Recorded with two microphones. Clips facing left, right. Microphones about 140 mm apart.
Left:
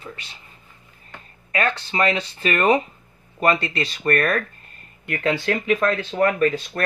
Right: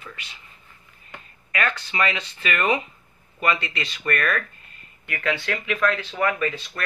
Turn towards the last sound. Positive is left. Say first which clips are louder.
# left 5 dB
turn(degrees=40)  # may be behind; listen again after turning